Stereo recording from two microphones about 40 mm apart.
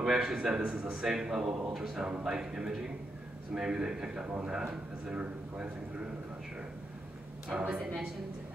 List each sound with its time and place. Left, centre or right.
0.0 s speech: centre
0.6 s a man's voice: right
5.1 s a man's voice: right
7.5 s speech: centre